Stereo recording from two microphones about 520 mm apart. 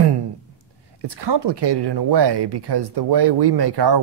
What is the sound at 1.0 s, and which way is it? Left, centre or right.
Speech, right.